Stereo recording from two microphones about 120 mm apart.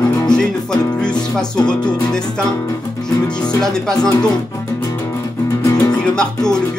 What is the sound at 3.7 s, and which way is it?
Speech, 5° left (ahead or behind).